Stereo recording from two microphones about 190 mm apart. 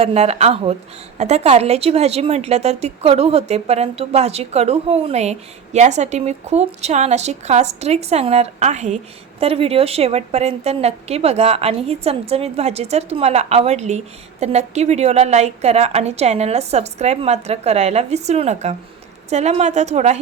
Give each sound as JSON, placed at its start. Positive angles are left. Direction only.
{"t": 0.0, "sound": "a woman's voice", "side_deg": -35}